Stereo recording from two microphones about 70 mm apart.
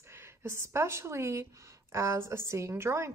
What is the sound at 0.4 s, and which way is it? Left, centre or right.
Speech, right.